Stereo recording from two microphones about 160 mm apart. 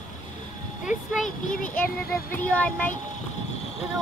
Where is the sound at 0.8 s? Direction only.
Centre (ahead or behind).